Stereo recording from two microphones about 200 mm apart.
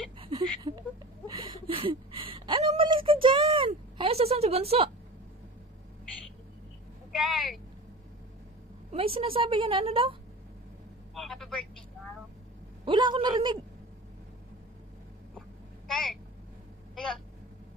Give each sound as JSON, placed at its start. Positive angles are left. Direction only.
{"t": 0.2, "sound": "a sound", "side_deg": -25}
{"t": 7.1, "sound": "vehicle", "side_deg": 0}
{"t": 8.9, "sound": "a woman's voice", "side_deg": -30}
{"t": 11.1, "sound": "telephone", "side_deg": 0}
{"t": 12.8, "sound": "a woman's voice", "side_deg": -25}
{"t": 15.9, "sound": "speech", "side_deg": 0}
{"t": 16.9, "sound": "a sound", "side_deg": 0}